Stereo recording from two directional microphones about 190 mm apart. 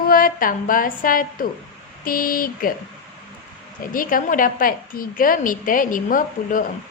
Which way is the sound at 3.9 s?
45° left (ahead or behind).